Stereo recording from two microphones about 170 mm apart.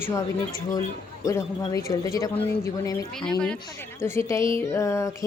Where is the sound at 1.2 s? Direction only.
20° left (ahead or behind).